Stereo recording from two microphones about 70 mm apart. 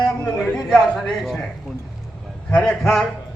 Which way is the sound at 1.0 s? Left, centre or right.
Centre.